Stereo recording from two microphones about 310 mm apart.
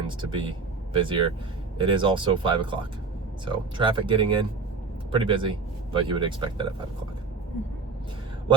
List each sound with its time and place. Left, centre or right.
0.2 s speech: centre